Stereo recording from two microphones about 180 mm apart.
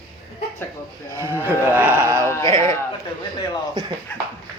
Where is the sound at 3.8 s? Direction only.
20° right (ahead or behind).